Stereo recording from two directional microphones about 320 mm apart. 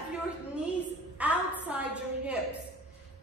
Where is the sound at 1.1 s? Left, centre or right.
Centre.